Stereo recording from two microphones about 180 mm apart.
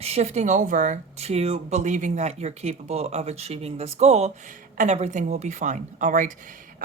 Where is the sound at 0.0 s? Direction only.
35° right (ahead or behind).